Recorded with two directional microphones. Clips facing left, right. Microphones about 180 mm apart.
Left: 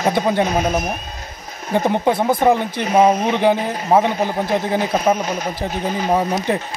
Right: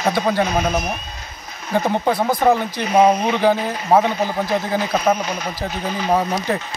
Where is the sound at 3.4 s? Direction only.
20° left (ahead or behind).